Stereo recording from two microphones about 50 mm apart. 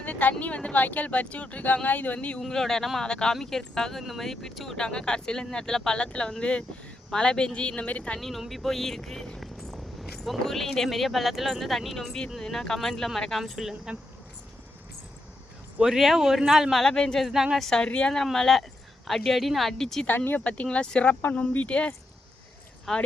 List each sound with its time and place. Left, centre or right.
0.0 s speech: left
2.5 s speech: centre
3.9 s speech: centre
4.8 s speech: centre
8.2 s speech: centre
13.4 s speech: centre
15.8 s speech: centre
16.7 s speech: centre
17.8 s speech: left
18.1 s speech: centre
20.1 s speech: left
20.4 s speech: left
22.9 s speech: centre